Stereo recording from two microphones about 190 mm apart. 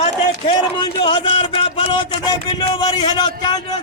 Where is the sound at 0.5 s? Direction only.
25° left (ahead or behind).